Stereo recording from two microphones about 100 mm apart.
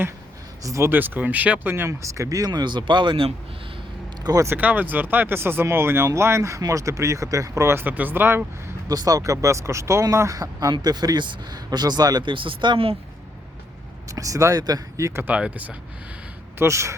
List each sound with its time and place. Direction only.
0.6 s speech: 30° right (ahead or behind)
0.9 s speech: 20° right (ahead or behind); by 3.2 s 55° right (ahead or behind)
4.2 s speech: 40° right (ahead or behind)
4.4 s speech: 20° right (ahead or behind)
8.9 s speech: 35° right (ahead or behind); by 13.0 s 60° right (ahead or behind)
14.1 s speech: 35° right (ahead or behind)
15.3 s speech: 15° right (ahead or behind)
16.6 s speech: 30° right (ahead or behind)